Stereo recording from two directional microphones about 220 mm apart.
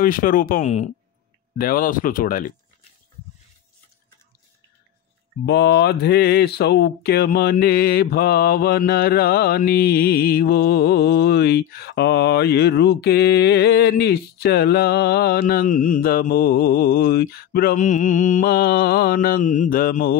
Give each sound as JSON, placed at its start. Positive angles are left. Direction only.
{"t": 0.0, "sound": "speech", "side_deg": 40}
{"t": 5.4, "sound": "speech", "side_deg": 50}